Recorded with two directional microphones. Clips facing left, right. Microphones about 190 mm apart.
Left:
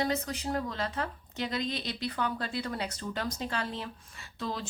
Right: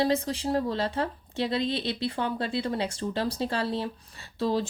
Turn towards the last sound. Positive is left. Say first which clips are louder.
# right 9 dB
turn(degrees=-35)  # may be behind; listen again after turning